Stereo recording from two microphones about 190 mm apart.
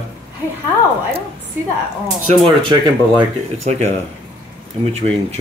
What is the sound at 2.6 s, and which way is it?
A woman's voice, 25° right (ahead or behind).